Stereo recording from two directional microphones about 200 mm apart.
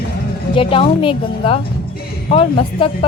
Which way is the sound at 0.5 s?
25° left (ahead or behind).